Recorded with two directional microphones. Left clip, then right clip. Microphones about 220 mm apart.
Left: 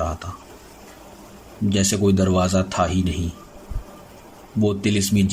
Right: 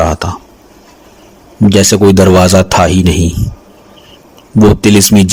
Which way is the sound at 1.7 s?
45° right (ahead or behind).